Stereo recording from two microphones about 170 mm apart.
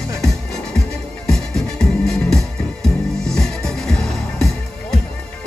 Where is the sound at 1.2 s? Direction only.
5° left (ahead or behind).